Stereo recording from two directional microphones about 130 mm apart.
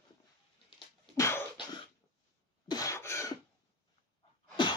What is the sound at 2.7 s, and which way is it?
Cough, 25° left (ahead or behind).